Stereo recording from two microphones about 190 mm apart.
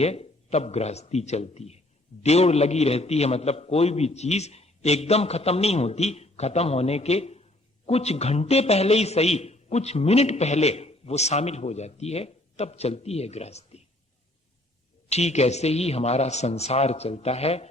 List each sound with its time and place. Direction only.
0.0 s a man's voice: 35° left (ahead or behind)
15.1 s a man's voice: 35° left (ahead or behind)